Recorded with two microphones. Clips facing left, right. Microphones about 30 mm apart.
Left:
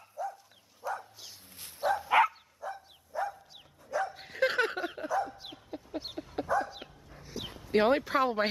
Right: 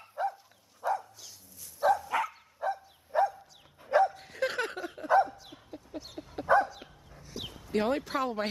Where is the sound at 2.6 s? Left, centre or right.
Right.